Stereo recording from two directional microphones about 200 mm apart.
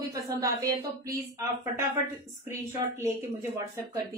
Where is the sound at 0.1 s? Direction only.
15° right (ahead or behind).